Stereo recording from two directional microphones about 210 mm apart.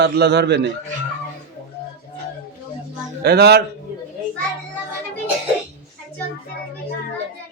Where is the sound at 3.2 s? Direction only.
50° right (ahead or behind).